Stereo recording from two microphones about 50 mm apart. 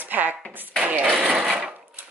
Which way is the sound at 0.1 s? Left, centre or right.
Right.